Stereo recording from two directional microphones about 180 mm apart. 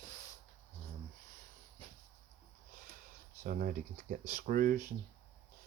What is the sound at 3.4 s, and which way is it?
Speech, 50° right (ahead or behind).